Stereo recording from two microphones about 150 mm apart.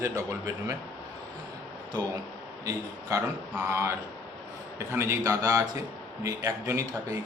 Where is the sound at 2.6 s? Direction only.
20° right (ahead or behind).